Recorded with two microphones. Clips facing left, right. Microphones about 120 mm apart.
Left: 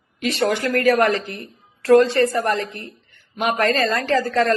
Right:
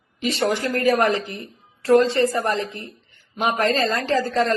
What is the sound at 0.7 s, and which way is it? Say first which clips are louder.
A man's voice: left 2 dB; 65° left (ahead or behind).